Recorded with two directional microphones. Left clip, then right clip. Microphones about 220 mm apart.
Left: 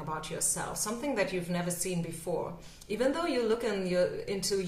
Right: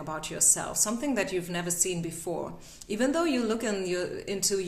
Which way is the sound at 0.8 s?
40° right (ahead or behind).